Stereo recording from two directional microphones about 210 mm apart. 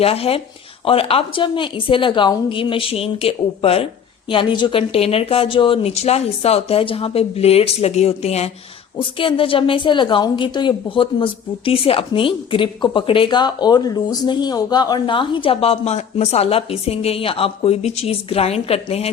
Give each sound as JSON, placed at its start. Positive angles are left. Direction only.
{"t": 0.0, "sound": "a woman's voice", "side_deg": 30}